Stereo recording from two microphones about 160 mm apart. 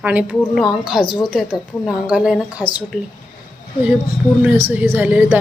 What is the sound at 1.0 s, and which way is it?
Speech, 30° left (ahead or behind).